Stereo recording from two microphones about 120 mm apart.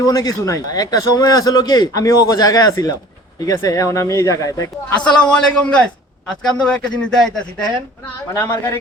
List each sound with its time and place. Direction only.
0.0 s a man's voice: 30° left (ahead or behind)
5.0 s a man's voice: 10° left (ahead or behind)
8.3 s speech: 25° left (ahead or behind)